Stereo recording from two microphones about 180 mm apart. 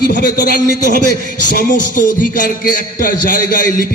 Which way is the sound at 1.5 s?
50° left (ahead or behind).